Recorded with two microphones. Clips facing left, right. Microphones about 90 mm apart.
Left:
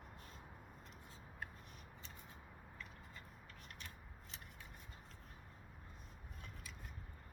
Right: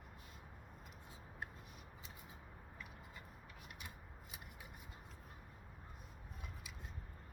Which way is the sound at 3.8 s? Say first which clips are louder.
Right 1 dB; 10° right (ahead or behind).